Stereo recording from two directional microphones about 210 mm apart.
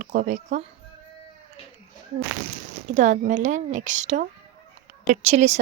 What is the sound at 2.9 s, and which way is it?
A woman's voice, 35° right (ahead or behind).